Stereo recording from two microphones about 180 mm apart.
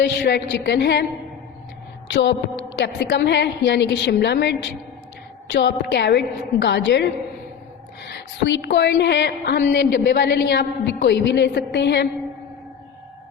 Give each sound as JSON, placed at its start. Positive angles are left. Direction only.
{"t": 0.0, "sound": "a woman's voice", "side_deg": 75}
{"t": 2.0, "sound": "a sound", "side_deg": 75}
{"t": 2.8, "sound": "a woman's voice", "side_deg": 70}